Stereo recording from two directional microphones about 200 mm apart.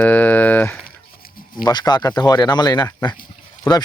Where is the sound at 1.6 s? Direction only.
20° left (ahead or behind).